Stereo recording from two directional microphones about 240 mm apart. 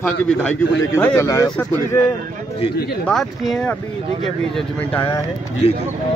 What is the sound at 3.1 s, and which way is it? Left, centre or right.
Speech, centre.